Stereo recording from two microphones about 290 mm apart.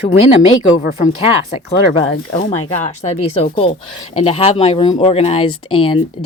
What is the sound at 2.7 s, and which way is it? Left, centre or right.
Speech, left.